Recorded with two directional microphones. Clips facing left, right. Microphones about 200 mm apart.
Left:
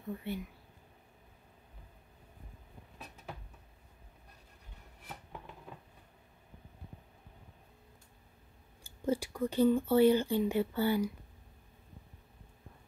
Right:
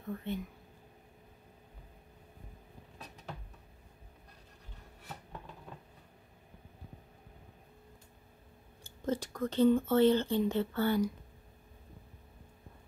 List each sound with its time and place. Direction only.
0.1 s speech: 10° left (ahead or behind)
5.0 s a sound: 5° left (ahead or behind)
9.0 s speech: 10° left (ahead or behind)